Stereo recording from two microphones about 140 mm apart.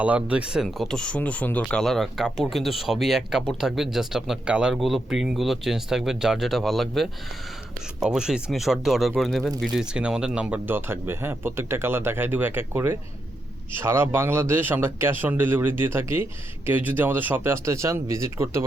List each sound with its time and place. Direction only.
0.0 s speech: 10° right (ahead or behind)